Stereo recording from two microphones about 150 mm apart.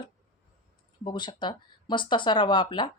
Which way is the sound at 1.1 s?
30° left (ahead or behind).